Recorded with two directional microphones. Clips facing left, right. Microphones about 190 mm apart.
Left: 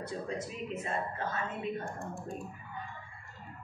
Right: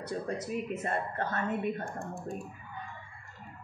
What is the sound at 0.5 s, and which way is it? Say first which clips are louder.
A woman's voice: right 4 dB; 65° right (ahead or behind).